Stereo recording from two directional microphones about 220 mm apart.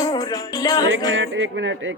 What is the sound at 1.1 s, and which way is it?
Speech, 60° right (ahead or behind).